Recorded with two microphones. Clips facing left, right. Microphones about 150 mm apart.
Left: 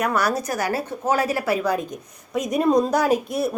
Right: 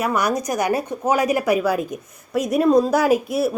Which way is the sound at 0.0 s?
15° right (ahead or behind).